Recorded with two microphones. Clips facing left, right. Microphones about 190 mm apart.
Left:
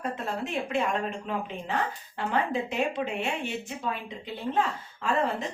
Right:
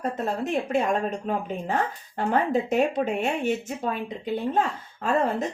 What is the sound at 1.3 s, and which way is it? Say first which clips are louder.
Speech: right 5 dB; 45° right (ahead or behind).